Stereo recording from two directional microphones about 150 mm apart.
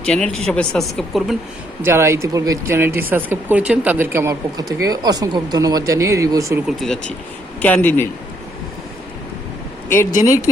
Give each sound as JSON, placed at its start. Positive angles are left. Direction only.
{"t": 0.0, "sound": "speech", "side_deg": 5}
{"t": 1.8, "sound": "speech", "side_deg": -15}
{"t": 6.7, "sound": "speech", "side_deg": 0}
{"t": 10.0, "sound": "speech", "side_deg": 60}
{"t": 10.2, "sound": "speech", "side_deg": 20}